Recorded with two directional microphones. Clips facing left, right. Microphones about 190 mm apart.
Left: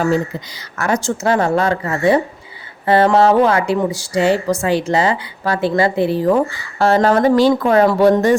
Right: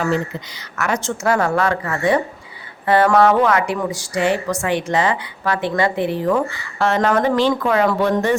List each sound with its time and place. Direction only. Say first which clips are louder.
0.8 s a woman's voice: left 3 dB; 35° left (ahead or behind)